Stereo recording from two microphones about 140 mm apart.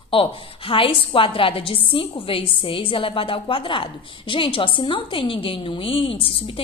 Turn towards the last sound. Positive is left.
turn(degrees=40)  # may be behind; listen again after turning